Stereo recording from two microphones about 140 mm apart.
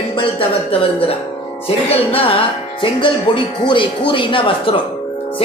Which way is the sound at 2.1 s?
40° left (ahead or behind).